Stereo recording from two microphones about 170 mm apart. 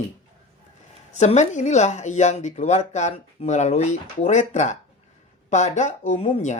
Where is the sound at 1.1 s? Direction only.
45° left (ahead or behind).